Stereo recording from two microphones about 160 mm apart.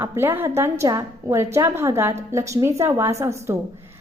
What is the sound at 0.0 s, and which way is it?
A woman's voice, 15° right (ahead or behind).